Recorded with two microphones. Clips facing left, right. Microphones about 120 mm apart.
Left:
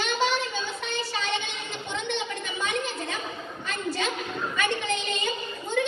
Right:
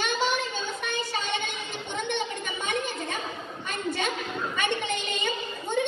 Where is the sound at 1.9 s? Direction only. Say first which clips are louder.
Right 1 dB; 50° right (ahead or behind).